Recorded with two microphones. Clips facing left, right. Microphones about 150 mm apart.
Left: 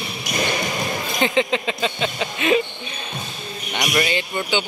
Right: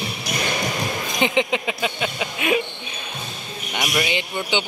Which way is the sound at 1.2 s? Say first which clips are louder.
Left 1 dB; 15° right (ahead or behind).